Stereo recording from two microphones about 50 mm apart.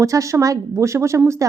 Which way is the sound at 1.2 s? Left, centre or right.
Right.